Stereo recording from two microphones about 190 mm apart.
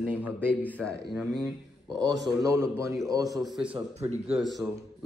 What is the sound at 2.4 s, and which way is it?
Speech, 15° right (ahead or behind).